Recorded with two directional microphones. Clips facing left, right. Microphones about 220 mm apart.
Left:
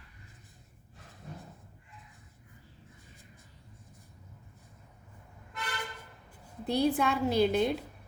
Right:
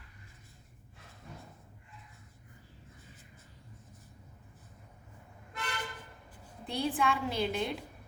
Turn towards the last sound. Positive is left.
turn(degrees=40)  # may be behind; listen again after turning